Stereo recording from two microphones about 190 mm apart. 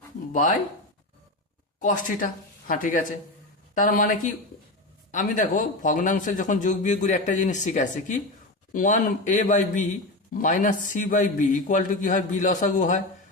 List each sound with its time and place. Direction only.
1.8 s a man's voice: 45° left (ahead or behind)